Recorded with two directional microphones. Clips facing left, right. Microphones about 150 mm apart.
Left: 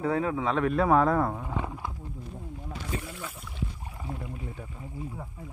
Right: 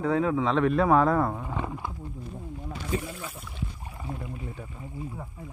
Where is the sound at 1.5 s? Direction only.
5° left (ahead or behind).